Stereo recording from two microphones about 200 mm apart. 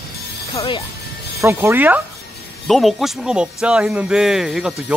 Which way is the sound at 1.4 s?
10° right (ahead or behind).